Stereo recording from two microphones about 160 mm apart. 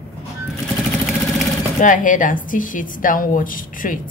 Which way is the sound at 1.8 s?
55° left (ahead or behind).